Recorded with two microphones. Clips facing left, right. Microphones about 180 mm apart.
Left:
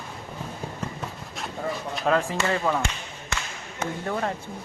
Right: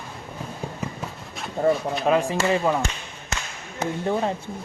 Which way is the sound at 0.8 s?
10° right (ahead or behind).